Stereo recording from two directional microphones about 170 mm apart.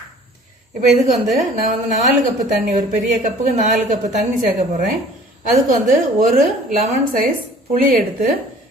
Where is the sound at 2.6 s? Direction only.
50° right (ahead or behind).